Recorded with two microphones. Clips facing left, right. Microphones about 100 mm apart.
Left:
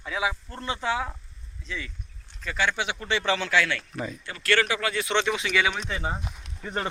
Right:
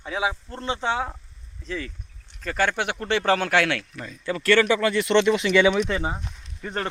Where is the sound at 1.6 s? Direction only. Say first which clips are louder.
Right 5 dB; 40° right (ahead or behind); by 3.8 s 60° right (ahead or behind).